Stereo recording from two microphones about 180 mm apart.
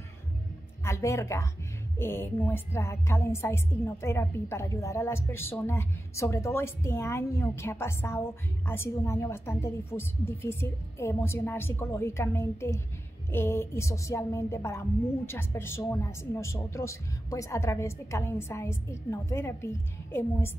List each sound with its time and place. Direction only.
0.8 s a woman's voice: 15° left (ahead or behind)